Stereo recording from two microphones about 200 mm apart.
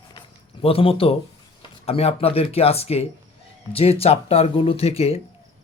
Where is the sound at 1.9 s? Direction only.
30° left (ahead or behind).